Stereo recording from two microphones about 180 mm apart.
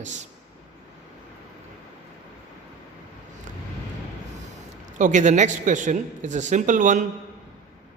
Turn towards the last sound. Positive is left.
turn(degrees=-45)  # may be behind; listen again after turning